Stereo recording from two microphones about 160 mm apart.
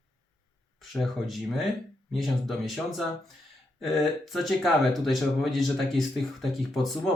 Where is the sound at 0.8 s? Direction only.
Centre (ahead or behind).